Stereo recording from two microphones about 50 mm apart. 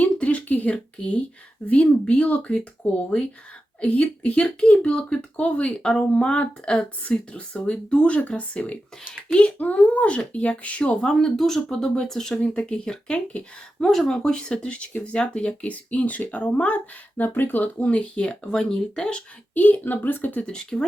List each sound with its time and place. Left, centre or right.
0.0 s a sound: left
0.9 s speech: left
11.2 s speech: centre
12.4 s speech: centre
13.7 s speech: centre
19.5 s speech: left
20.5 s speech: centre